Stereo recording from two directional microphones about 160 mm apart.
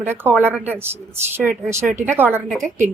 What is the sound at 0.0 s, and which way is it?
A woman's voice, 15° right (ahead or behind).